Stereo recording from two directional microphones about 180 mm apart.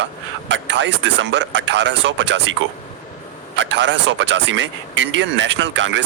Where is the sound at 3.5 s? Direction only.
90° right.